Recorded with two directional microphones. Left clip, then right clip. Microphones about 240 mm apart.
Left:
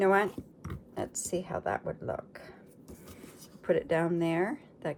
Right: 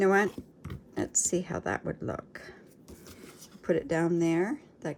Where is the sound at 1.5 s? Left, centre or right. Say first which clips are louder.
Even; right.